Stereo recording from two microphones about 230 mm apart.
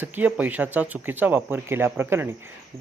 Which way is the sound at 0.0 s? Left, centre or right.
Centre.